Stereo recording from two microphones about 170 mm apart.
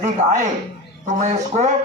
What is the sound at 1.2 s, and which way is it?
Speech, 45° right (ahead or behind).